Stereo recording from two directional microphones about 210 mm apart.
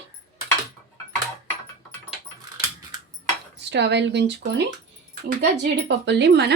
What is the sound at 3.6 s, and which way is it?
Speech, 55° right (ahead or behind).